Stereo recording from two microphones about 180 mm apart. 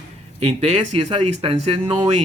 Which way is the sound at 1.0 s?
35° right (ahead or behind).